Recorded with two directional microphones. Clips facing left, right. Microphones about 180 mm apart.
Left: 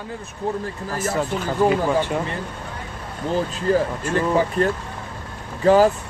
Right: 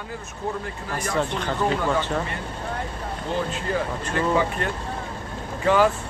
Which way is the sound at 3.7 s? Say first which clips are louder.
Left 9 dB; 35° left (ahead or behind).